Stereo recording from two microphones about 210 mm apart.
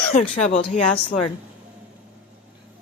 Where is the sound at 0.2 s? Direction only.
30° left (ahead or behind).